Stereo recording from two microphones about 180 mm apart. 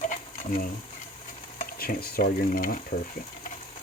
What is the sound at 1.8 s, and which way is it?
Speech, 55° left (ahead or behind).